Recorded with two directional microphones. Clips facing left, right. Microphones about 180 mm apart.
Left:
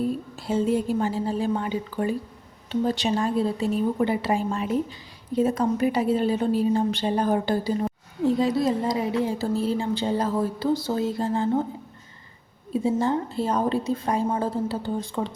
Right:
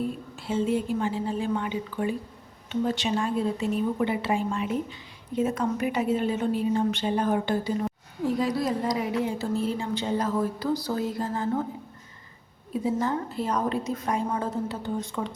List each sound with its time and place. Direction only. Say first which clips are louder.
0.0 s a woman's voice: left 4 dB; 40° left (ahead or behind)
8.2 s speech: left 4 dB; 25° left (ahead or behind)
12.7 s speech: left 3 dB; 25° left (ahead or behind)